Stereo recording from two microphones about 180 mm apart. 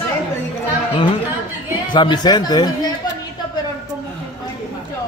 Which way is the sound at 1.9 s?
25° left (ahead or behind).